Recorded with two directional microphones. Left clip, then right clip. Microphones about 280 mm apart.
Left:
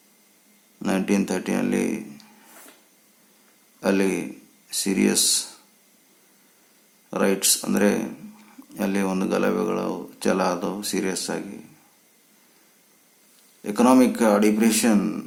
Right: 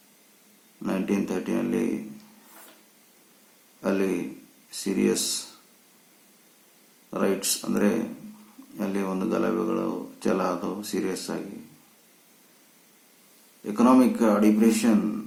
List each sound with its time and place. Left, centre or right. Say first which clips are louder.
0.8 s speech: left 4 dB; left
3.8 s a sound: left 4 dB; left
4.8 s speech: left 3 dB; left
7.1 s speech: left 4 dB; left
13.7 s speech: left 2 dB; left